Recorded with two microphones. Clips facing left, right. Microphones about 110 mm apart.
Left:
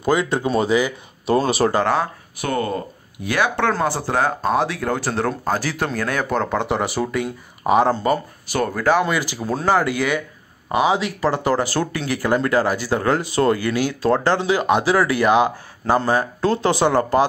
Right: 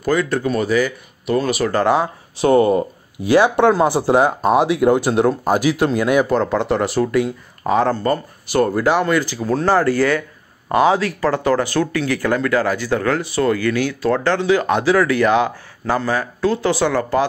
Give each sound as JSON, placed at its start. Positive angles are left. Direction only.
{"t": 0.0, "sound": "speech", "side_deg": 20}
{"t": 1.2, "sound": "speech", "side_deg": 30}
{"t": 2.3, "sound": "speech", "side_deg": -20}
{"t": 6.2, "sound": "speech", "side_deg": 0}
{"t": 7.6, "sound": "speech", "side_deg": 15}
{"t": 8.5, "sound": "speech", "side_deg": -5}
{"t": 9.0, "sound": "speech", "side_deg": 15}
{"t": 11.0, "sound": "speech", "side_deg": 25}
{"t": 12.1, "sound": "speech", "side_deg": 20}
{"t": 12.4, "sound": "speech", "side_deg": 30}
{"t": 12.6, "sound": "speech", "side_deg": 10}
{"t": 12.9, "sound": "speech", "side_deg": 25}
{"t": 13.6, "sound": "speech", "side_deg": 15}
{"t": 16.0, "sound": "speech", "side_deg": 25}